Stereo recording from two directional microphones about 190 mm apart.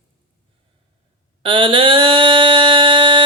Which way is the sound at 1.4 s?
25° right (ahead or behind).